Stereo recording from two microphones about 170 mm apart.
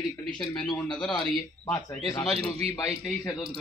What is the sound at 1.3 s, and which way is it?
Speech, 20° left (ahead or behind).